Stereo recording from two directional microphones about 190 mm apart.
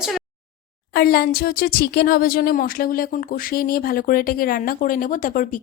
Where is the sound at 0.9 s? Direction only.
55° left (ahead or behind).